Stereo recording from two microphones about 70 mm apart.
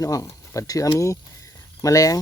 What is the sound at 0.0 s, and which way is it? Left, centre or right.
Speech, left.